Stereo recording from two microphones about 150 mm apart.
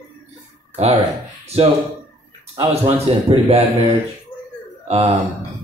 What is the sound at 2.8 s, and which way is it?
Speech, 40° right (ahead or behind).